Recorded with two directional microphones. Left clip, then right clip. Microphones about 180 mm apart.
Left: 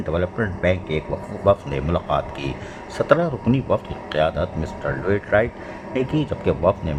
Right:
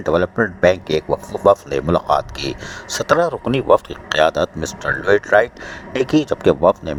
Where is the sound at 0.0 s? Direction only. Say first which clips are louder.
Right 7 dB; 40° right (ahead or behind).